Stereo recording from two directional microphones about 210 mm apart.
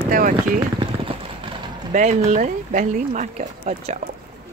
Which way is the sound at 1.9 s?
35° right (ahead or behind).